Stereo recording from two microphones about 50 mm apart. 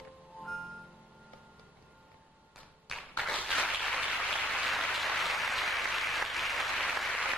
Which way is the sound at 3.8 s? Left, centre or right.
Centre.